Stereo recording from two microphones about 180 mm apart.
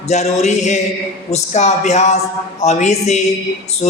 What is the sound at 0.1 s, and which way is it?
Speech, 40° left (ahead or behind).